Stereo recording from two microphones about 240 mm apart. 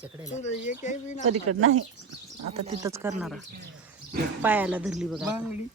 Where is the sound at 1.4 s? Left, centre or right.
Right.